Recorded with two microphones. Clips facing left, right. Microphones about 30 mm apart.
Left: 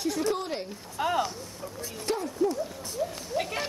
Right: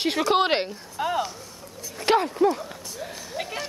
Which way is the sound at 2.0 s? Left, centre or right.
Right.